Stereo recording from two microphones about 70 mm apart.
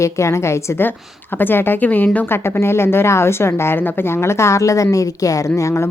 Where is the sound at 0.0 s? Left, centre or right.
Left.